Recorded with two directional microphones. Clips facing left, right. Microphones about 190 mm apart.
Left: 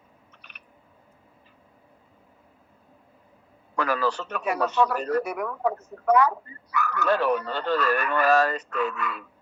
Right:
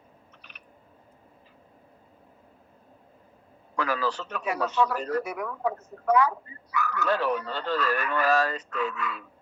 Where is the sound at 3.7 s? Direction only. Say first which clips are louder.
Left 3 dB; 55° left (ahead or behind).